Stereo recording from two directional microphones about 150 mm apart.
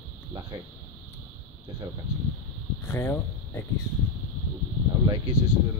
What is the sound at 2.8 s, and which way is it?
Speech, 15° left (ahead or behind).